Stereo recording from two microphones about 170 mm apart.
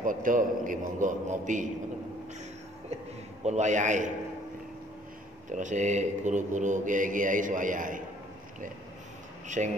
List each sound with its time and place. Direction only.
0.0 s speech: 50° right (ahead or behind)
3.4 s speech: 45° right (ahead or behind)
5.5 s speech: 45° right (ahead or behind)
9.6 s speech: 45° right (ahead or behind)